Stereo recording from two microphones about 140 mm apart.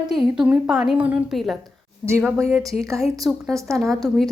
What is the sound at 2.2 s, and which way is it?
Speech, 20° right (ahead or behind).